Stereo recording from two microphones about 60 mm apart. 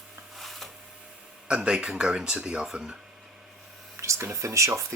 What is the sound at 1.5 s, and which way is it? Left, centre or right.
Speech, centre.